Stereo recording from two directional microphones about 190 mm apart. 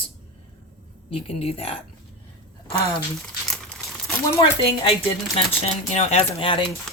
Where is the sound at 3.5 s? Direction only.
5° left (ahead or behind).